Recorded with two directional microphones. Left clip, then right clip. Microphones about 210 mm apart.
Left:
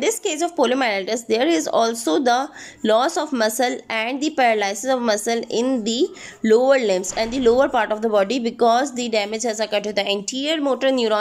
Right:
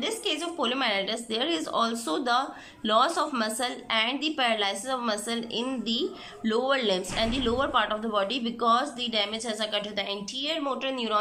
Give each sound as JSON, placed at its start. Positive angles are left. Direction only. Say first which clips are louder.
{"t": 0.0, "sound": "speech", "louder": "left 8 dB", "side_deg": 35}